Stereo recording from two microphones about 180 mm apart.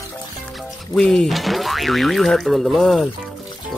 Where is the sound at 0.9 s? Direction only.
5° left (ahead or behind).